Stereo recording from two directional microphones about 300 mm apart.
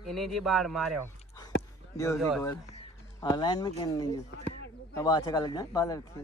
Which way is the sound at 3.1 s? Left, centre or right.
Centre.